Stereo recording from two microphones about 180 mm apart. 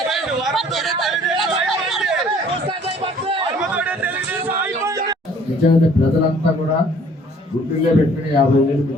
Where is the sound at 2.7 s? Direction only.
30° right (ahead or behind).